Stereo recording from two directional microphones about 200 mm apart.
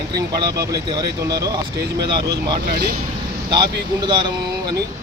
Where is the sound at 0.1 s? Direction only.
20° right (ahead or behind).